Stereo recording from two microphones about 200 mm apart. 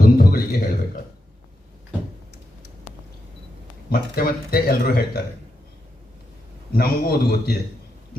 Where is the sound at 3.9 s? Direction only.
50° left (ahead or behind).